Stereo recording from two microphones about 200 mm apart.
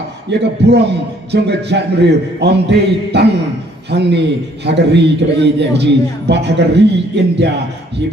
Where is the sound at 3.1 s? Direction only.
55° right (ahead or behind).